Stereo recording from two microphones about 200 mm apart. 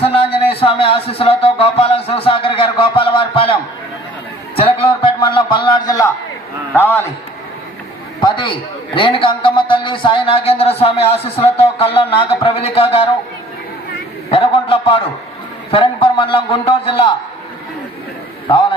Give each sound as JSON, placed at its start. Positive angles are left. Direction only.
{"t": 0.0, "sound": "music", "side_deg": 30}
{"t": 0.3, "sound": "speech", "side_deg": 30}
{"t": 4.5, "sound": "a sound", "side_deg": 30}
{"t": 6.7, "sound": "a man's voice", "side_deg": 10}
{"t": 8.2, "sound": "a sound", "side_deg": 25}
{"t": 9.0, "sound": "speech", "side_deg": 25}
{"t": 14.3, "sound": "speech", "side_deg": 30}